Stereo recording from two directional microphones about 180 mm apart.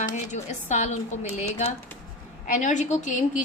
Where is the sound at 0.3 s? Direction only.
40° left (ahead or behind).